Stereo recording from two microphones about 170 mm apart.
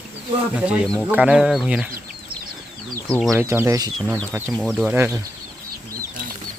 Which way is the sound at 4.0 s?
Centre (ahead or behind).